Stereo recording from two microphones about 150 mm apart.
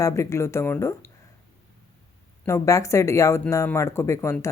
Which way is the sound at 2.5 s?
20° left (ahead or behind).